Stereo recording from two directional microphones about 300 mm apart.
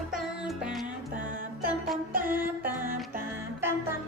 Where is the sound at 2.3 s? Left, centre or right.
Centre.